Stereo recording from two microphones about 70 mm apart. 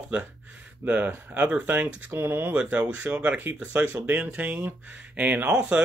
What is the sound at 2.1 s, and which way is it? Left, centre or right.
Speech, right.